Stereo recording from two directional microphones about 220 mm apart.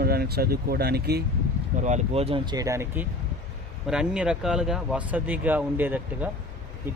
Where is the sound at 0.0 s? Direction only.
45° right (ahead or behind).